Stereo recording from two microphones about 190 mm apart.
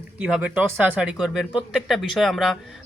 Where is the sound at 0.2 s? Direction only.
5° right (ahead or behind).